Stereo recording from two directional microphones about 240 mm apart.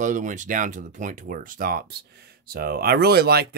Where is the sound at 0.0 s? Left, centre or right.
Right.